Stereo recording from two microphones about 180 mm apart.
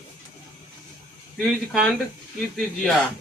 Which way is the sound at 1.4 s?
Centre (ahead or behind).